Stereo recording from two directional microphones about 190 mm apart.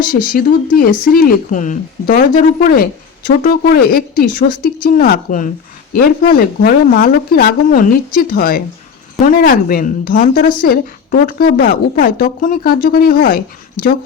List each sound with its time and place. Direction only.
0.0 s a woman's voice: 45° left (ahead or behind)